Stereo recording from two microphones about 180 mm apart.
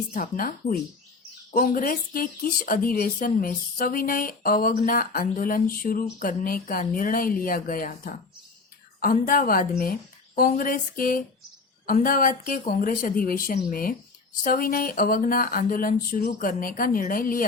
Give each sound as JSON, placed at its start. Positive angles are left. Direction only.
{"t": 0.1, "sound": "speech", "side_deg": 50}